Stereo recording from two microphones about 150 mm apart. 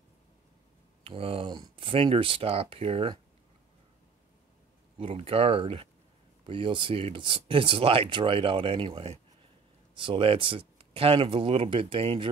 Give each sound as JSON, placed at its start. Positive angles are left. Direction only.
{"t": 1.0, "sound": "speech", "side_deg": -40}
{"t": 4.9, "sound": "speech", "side_deg": -40}